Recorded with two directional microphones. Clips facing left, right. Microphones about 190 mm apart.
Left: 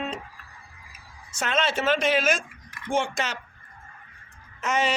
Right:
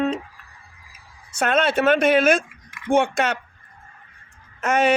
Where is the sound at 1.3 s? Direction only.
60° right (ahead or behind).